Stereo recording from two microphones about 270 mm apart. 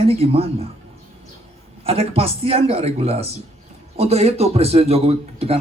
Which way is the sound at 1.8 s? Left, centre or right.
Right.